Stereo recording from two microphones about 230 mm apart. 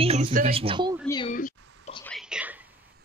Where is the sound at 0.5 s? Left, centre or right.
Right.